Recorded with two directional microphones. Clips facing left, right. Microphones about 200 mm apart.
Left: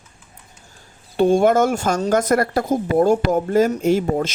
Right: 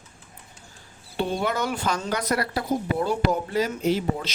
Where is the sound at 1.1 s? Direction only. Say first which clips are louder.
Left 11 dB; 45° left (ahead or behind).